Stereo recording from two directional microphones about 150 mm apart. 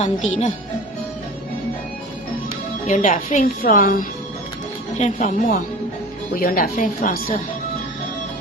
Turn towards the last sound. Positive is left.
turn(degrees=60)  # may be behind; listen again after turning